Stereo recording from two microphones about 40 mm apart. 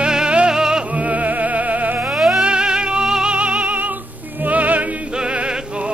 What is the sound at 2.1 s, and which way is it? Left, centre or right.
Music, centre.